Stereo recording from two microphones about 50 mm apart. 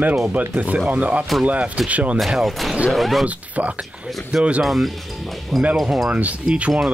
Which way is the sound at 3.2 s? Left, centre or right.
Right.